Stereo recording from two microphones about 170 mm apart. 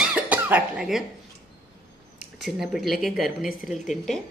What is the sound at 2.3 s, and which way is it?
A woman's voice, centre (ahead or behind).